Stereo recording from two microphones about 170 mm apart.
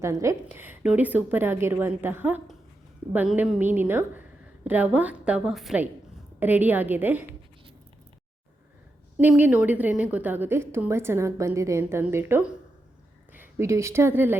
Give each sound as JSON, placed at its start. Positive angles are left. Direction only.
{"t": 0.0, "sound": "a woman's voice", "side_deg": -15}
{"t": 9.2, "sound": "a woman's voice", "side_deg": -10}